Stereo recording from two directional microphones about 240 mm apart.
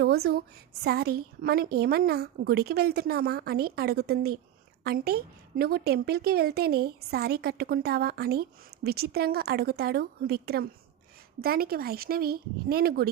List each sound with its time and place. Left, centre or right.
0.0 s a woman's voice: right